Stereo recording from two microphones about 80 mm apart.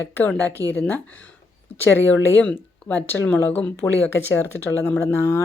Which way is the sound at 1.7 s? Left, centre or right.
Left.